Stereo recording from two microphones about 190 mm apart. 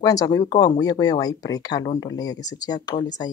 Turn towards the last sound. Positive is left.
turn(degrees=20)  # may be behind; listen again after turning